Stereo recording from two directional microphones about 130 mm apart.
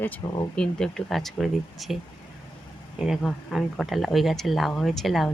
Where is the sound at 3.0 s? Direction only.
Centre (ahead or behind).